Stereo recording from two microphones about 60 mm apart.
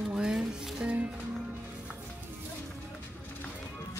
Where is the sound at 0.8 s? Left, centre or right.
Right.